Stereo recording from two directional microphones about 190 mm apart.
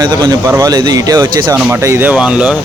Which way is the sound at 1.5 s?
10° right (ahead or behind).